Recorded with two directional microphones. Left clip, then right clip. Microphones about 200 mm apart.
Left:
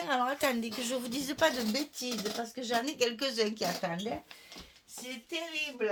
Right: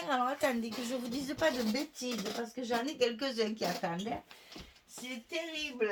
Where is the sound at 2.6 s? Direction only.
50° left (ahead or behind).